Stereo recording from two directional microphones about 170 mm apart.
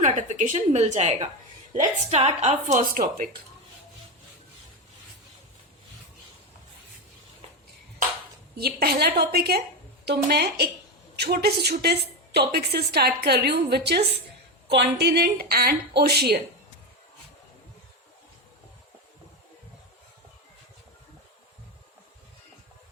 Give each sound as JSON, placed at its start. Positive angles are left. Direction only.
{"t": 0.0, "sound": "a woman's voice", "side_deg": -45}
{"t": 8.5, "sound": "a woman's voice", "side_deg": -65}